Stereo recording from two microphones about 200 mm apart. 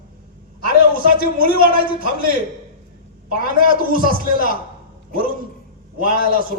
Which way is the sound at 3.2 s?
45° right (ahead or behind).